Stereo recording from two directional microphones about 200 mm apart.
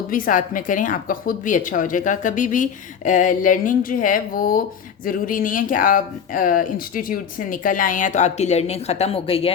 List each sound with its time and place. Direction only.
0.1 s a woman's voice: 45° left (ahead or behind)